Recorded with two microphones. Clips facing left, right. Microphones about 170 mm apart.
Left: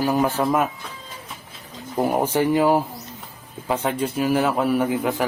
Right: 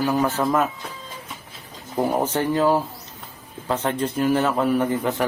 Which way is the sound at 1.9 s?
10° left (ahead or behind).